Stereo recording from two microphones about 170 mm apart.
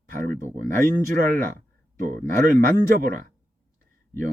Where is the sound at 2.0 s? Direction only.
50° right (ahead or behind).